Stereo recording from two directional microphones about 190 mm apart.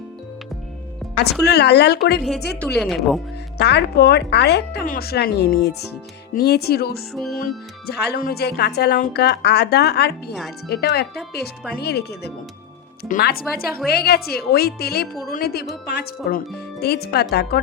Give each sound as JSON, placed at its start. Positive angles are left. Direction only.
{"t": 1.1, "sound": "a woman's voice", "side_deg": 60}
{"t": 2.7, "sound": "speech", "side_deg": 0}
{"t": 3.6, "sound": "a woman's voice", "side_deg": 60}
{"t": 7.1, "sound": "speech", "side_deg": 0}
{"t": 7.9, "sound": "a woman's voice", "side_deg": 55}
{"t": 13.1, "sound": "a woman's voice", "side_deg": 45}